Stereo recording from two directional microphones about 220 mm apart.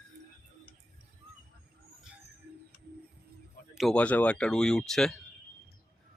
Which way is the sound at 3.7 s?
5° left (ahead or behind).